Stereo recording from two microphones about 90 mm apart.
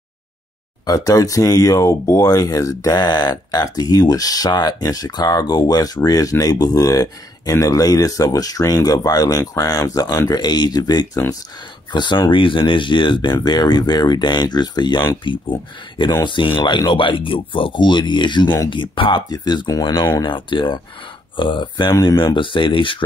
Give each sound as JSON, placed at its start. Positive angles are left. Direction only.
{"t": 0.8, "sound": "speech", "side_deg": 40}
{"t": 15.3, "sound": "speech", "side_deg": 65}
{"t": 19.2, "sound": "speech", "side_deg": 50}
{"t": 20.2, "sound": "speech", "side_deg": 65}